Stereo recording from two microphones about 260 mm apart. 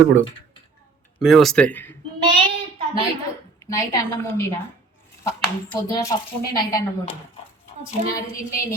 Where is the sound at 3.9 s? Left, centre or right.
Centre.